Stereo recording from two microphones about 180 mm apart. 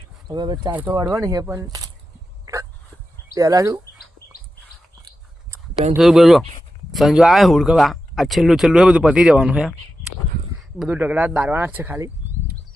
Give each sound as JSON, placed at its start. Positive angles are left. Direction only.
{"t": 0.3, "sound": "speech", "side_deg": -25}
{"t": 2.5, "sound": "dog", "side_deg": -20}
{"t": 3.3, "sound": "speech", "side_deg": -20}
{"t": 6.0, "sound": "speech", "side_deg": 0}
{"t": 10.8, "sound": "speech", "side_deg": -10}